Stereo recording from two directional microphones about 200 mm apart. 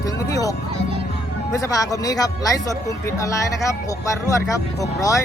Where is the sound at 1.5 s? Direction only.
15° left (ahead or behind).